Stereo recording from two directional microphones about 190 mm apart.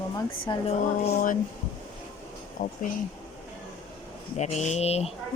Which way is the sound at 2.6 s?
45° left (ahead or behind).